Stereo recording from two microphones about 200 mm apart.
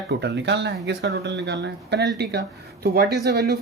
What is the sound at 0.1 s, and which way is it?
Speech, 60° right (ahead or behind).